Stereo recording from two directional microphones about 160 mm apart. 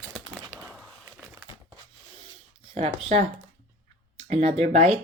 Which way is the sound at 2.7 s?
40° right (ahead or behind).